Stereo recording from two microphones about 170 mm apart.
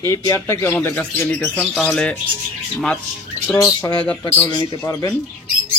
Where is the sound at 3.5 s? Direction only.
20° left (ahead or behind).